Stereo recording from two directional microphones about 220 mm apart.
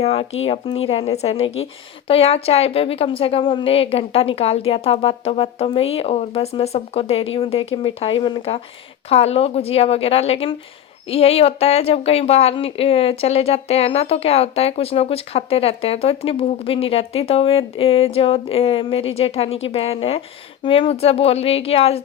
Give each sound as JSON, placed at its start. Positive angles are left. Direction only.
{"t": 0.0, "sound": "speech", "side_deg": 25}